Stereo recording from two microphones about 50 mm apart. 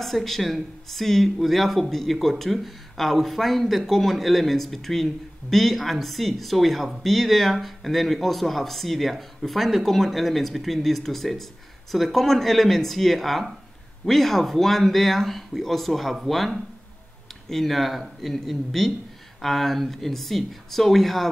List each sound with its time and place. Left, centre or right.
0.0 s speech: centre